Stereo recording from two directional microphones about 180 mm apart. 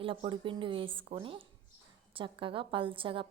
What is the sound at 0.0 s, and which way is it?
A woman's voice, 30° right (ahead or behind).